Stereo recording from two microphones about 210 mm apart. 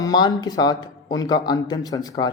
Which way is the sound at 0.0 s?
20° left (ahead or behind).